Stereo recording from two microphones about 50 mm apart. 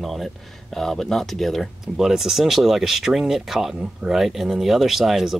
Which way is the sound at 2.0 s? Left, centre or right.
Centre.